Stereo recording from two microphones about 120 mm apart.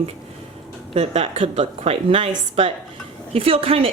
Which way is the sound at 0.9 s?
60° right (ahead or behind).